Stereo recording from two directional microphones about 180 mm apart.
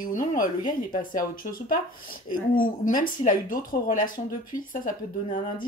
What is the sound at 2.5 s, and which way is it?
Speech, 50° left (ahead or behind).